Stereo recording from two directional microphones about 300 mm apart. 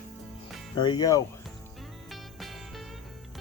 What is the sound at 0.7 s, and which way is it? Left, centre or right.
Speech, centre.